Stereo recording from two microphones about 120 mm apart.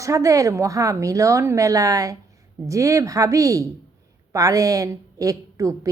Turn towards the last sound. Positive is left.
turn(degrees=-30)  # may be behind; listen again after turning